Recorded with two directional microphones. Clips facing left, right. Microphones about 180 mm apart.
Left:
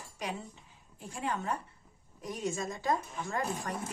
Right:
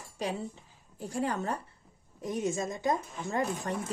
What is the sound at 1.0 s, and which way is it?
Speech, 40° right (ahead or behind).